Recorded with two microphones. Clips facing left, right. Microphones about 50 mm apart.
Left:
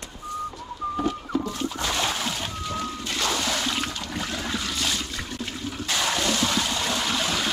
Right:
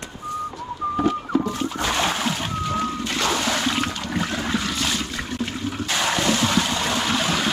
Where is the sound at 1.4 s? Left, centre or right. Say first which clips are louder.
Right 4 dB; right.